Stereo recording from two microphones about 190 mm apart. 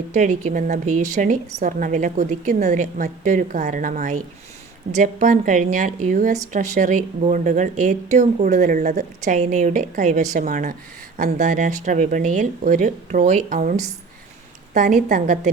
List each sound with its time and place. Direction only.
0.1 s a woman's voice: 40° right (ahead or behind)